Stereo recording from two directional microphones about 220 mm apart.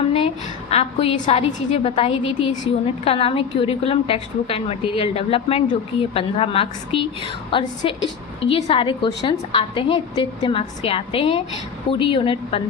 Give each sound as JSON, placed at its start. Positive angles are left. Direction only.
{"t": 0.7, "sound": "a woman's voice", "side_deg": 30}